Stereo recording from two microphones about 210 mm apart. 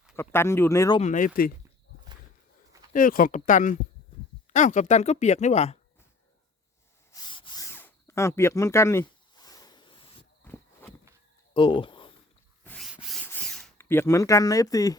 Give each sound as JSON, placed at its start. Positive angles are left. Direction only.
{"t": 0.2, "sound": "speech", "side_deg": 10}
{"t": 0.9, "sound": "speech", "side_deg": 35}
{"t": 2.9, "sound": "speech", "side_deg": 40}
{"t": 7.1, "sound": "a sound", "side_deg": 20}
{"t": 10.4, "sound": "walk", "side_deg": 10}
{"t": 11.5, "sound": "a sound", "side_deg": 25}
{"t": 12.6, "sound": "rub", "side_deg": 5}
{"t": 13.2, "sound": "a sound", "side_deg": 5}
{"t": 13.7, "sound": "speech", "side_deg": 10}